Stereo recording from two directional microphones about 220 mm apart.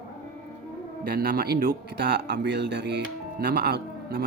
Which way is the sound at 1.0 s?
45° right (ahead or behind).